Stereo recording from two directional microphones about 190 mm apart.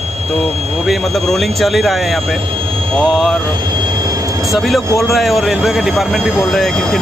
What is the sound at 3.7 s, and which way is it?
Train, 20° right (ahead or behind).